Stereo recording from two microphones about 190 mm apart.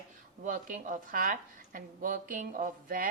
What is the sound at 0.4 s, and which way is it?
Speech, 45° right (ahead or behind).